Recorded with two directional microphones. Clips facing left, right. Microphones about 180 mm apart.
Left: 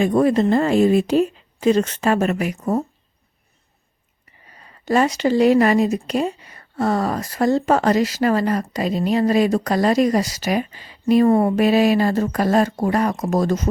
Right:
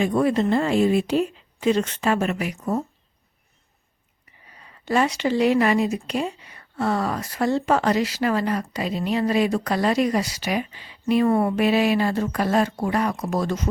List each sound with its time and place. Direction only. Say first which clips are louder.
0.0 s speech: left 4 dB; 40° left (ahead or behind)
4.5 s speech: left 4 dB; 40° left (ahead or behind)